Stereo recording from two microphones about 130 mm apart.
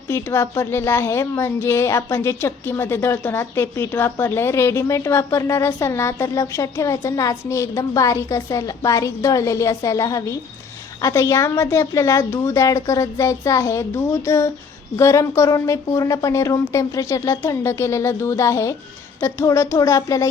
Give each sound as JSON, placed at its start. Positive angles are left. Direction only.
{"t": 0.1, "sound": "a woman's voice", "side_deg": 20}